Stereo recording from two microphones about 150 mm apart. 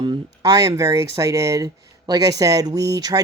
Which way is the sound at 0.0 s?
25° right (ahead or behind).